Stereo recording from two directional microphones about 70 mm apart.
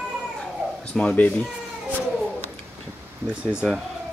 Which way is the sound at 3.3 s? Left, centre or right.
Centre.